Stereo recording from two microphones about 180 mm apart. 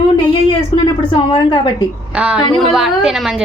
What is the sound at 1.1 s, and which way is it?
Speech, 30° left (ahead or behind).